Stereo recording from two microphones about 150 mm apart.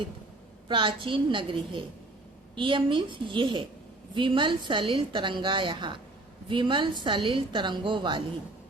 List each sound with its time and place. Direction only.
0.7 s a woman's voice: 35° right (ahead or behind)